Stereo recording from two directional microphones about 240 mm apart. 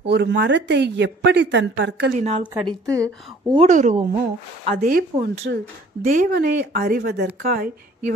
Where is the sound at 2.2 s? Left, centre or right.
Right.